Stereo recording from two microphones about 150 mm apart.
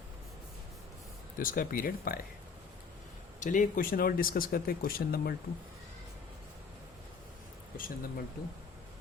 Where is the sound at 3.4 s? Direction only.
60° left (ahead or behind); by 5.3 s 80° left.